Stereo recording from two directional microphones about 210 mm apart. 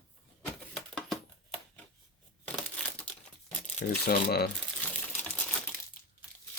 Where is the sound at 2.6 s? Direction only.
5° left (ahead or behind).